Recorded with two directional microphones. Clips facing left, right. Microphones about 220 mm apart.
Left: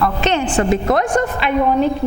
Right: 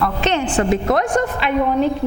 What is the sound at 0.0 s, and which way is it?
A woman's voice, 15° left (ahead or behind).